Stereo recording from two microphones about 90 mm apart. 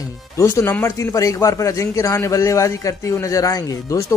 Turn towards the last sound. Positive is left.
turn(degrees=40)  # may be behind; listen again after turning